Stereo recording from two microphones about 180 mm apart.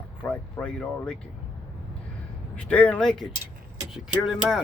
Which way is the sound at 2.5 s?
5° left (ahead or behind).